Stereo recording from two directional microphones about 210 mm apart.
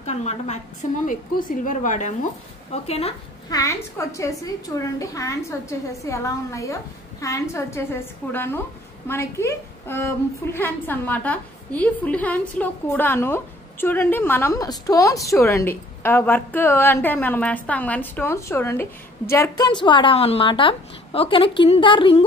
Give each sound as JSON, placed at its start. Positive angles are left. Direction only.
{"t": 0.0, "sound": "a woman's voice", "side_deg": 30}
{"t": 3.4, "sound": "a woman's voice", "side_deg": 15}